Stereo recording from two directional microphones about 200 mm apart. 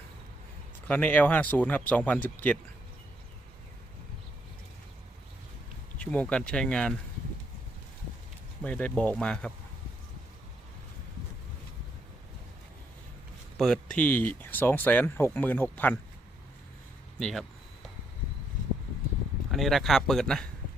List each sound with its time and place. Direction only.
0.9 s speech: 10° left (ahead or behind)
6.0 s speech: 5° left (ahead or behind)
8.6 s speech: 5° left (ahead or behind)
13.6 s speech: 5° left (ahead or behind)
17.2 s speech: 5° left (ahead or behind)
19.5 s speech: centre (ahead or behind)